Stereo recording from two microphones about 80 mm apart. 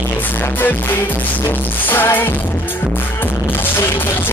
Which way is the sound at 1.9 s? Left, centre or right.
Left.